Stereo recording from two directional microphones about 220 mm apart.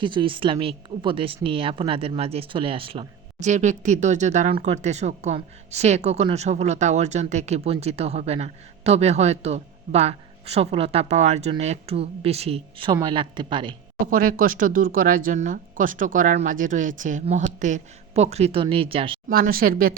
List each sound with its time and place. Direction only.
0.0 s speech: 20° right (ahead or behind)
14.0 s speech: 40° right (ahead or behind); by 19.2 s 25° right (ahead or behind)
19.3 s speech: 40° right (ahead or behind)